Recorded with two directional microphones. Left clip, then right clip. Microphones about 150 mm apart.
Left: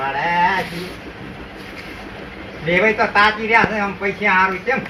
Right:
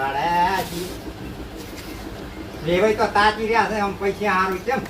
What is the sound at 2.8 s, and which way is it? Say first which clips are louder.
Speech: left 3 dB; 20° right (ahead or behind).